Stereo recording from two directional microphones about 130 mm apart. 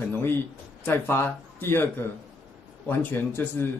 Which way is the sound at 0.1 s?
15° left (ahead or behind).